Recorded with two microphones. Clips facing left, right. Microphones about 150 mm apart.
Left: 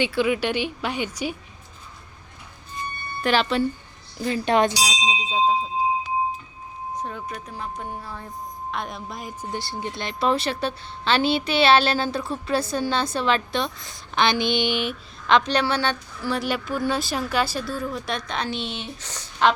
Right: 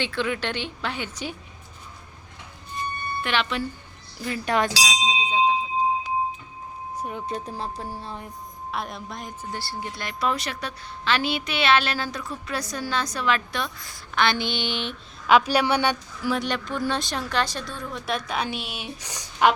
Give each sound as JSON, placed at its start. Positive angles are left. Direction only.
{"t": 0.0, "sound": "speech", "side_deg": 10}
{"t": 3.2, "sound": "speech", "side_deg": 35}
{"t": 4.3, "sound": "a woman's voice", "side_deg": 25}
{"t": 4.9, "sound": "bell", "side_deg": 10}
{"t": 7.3, "sound": "speech", "side_deg": -30}
{"t": 8.0, "sound": "speech", "side_deg": -20}
{"t": 8.7, "sound": "speech", "side_deg": 0}
{"t": 9.4, "sound": "a woman's voice", "side_deg": 20}
{"t": 15.3, "sound": "a woman's voice", "side_deg": -10}
{"t": 16.3, "sound": "speech", "side_deg": 5}